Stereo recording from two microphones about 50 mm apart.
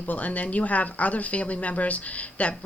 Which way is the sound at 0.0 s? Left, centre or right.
Left.